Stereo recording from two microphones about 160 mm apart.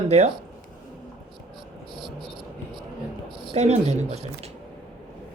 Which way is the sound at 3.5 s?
45° right (ahead or behind).